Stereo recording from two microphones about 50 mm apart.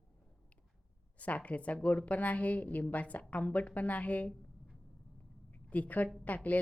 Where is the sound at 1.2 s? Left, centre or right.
Left.